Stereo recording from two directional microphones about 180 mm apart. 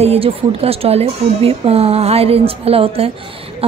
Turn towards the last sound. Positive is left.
turn(degrees=-30)  # may be behind; listen again after turning